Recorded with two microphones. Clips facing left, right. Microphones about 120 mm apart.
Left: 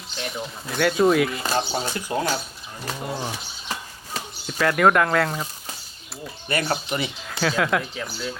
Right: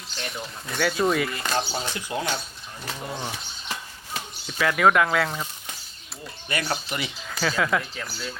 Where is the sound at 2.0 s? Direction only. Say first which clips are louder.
Left 4 dB; 40° left (ahead or behind).